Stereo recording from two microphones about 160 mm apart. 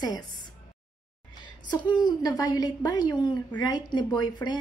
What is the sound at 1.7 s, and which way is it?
A woman's voice, 25° left (ahead or behind).